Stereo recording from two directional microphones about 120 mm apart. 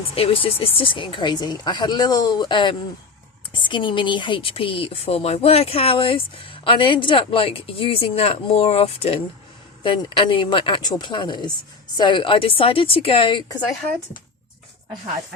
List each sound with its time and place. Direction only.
0.1 s speech: 55° left (ahead or behind)